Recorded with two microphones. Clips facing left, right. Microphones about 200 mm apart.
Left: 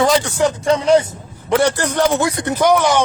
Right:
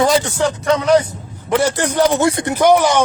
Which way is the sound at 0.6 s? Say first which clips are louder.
Even; 30° left (ahead or behind).